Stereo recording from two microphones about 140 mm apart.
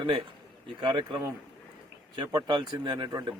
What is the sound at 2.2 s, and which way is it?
Speech, 30° right (ahead or behind).